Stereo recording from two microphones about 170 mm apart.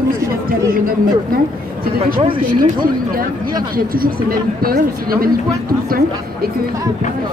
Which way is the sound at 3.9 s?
60° right (ahead or behind).